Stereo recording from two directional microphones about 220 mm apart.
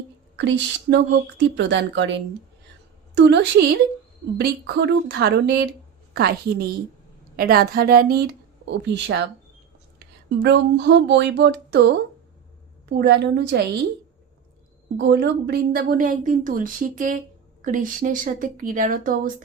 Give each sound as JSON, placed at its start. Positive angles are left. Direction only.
{"t": 0.3, "sound": "a woman's voice", "side_deg": -50}
{"t": 10.4, "sound": "a woman's voice", "side_deg": -50}
{"t": 14.9, "sound": "a woman's voice", "side_deg": -50}